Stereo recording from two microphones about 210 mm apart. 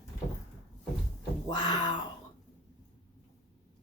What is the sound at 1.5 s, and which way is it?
Speech, 20° left (ahead or behind).